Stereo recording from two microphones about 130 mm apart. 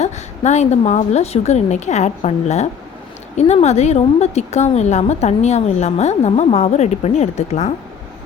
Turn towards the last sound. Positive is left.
turn(degrees=60)  # may be behind; listen again after turning